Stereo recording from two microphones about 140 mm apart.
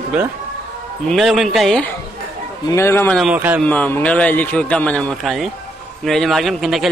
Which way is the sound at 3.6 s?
10° left (ahead or behind).